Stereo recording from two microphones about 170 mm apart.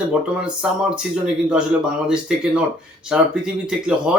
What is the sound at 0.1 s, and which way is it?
Speech, 5° right (ahead or behind).